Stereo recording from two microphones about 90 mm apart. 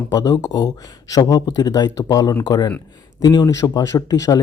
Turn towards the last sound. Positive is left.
turn(degrees=40)  # may be behind; listen again after turning